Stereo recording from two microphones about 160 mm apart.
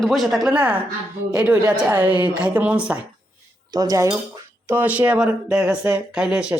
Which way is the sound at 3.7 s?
20° right (ahead or behind).